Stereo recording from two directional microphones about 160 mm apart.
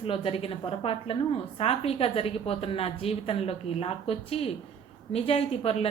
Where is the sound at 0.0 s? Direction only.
35° left (ahead or behind).